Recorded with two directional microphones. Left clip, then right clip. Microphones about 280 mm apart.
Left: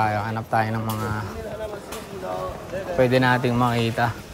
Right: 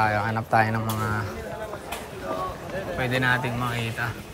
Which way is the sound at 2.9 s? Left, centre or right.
Left.